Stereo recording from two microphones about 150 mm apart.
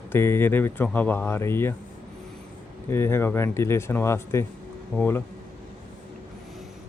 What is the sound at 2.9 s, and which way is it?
Speech, 15° left (ahead or behind).